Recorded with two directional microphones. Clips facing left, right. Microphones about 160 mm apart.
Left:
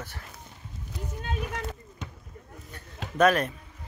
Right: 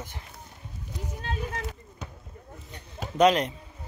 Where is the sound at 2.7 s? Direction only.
20° right (ahead or behind).